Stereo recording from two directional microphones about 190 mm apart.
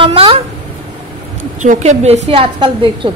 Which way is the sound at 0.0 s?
30° right (ahead or behind).